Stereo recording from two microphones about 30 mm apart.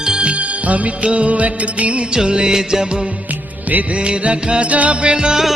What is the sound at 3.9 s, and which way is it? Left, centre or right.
Music, right.